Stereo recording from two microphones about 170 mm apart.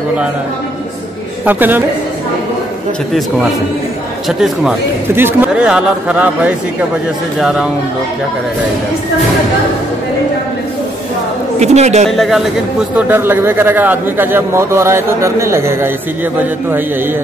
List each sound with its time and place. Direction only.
1.4 s a man's voice: 10° right (ahead or behind)
4.3 s a man's voice: 5° right (ahead or behind)
11.6 s a man's voice: 40° right (ahead or behind)
12.1 s a man's voice: centre (ahead or behind)
12.9 s a man's voice: 10° right (ahead or behind)